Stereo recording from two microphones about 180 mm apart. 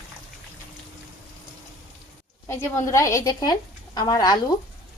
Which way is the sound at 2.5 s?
15° left (ahead or behind).